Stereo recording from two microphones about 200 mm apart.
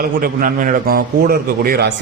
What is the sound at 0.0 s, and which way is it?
A man's voice, 45° right (ahead or behind).